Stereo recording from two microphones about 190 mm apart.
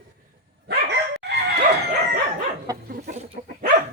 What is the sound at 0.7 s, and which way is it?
Dog, 60° right (ahead or behind).